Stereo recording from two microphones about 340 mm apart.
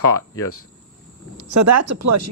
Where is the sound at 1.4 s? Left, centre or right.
Right.